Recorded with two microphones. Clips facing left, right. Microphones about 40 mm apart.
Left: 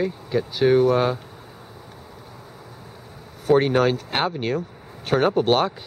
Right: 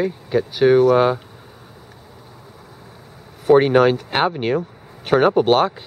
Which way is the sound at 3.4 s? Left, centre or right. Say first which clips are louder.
Right 5 dB; centre.